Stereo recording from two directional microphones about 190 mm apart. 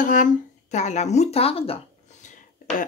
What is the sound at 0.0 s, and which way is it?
Speech, 45° left (ahead or behind).